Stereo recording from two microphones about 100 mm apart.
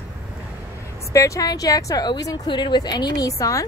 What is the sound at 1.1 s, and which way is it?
A woman's voice, 30° left (ahead or behind).